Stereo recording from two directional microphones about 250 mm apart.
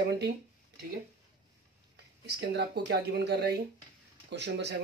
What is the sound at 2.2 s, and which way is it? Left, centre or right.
Speech, right.